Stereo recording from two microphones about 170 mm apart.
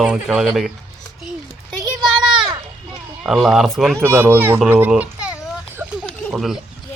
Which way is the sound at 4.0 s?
10° right (ahead or behind).